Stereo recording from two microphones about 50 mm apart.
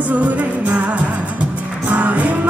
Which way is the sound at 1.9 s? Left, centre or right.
Right.